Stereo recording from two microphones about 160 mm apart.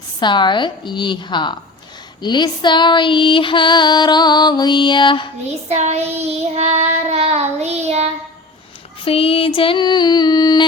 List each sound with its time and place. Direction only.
0.2 s female singing: 30° left (ahead or behind)
5.6 s child singing: 45° right (ahead or behind)
9.0 s female singing: 35° left (ahead or behind)